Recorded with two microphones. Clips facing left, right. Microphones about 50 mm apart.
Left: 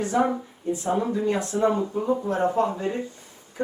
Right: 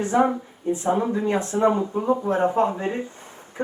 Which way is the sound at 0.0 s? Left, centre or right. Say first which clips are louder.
Right 3 dB; right.